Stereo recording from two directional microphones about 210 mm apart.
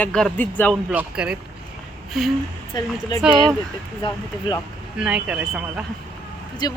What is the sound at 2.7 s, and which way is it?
Speech, 20° left (ahead or behind).